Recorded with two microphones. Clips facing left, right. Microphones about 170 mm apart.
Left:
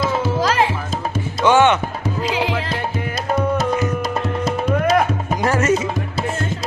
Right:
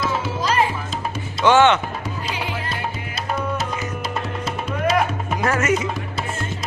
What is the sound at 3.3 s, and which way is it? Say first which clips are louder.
Music: left 7 dB; 45° left (ahead or behind).